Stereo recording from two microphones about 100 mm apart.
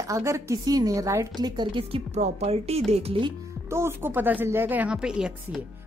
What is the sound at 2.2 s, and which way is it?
Speech, 90° right.